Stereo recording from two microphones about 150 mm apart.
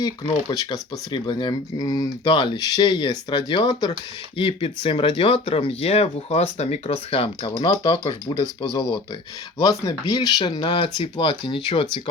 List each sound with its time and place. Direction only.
0.5 s speech: 25° left (ahead or behind)